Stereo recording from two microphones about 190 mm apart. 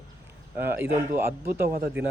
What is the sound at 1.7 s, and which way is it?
Speech, 50° right (ahead or behind).